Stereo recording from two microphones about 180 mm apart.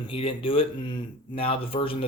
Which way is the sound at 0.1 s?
30° left (ahead or behind).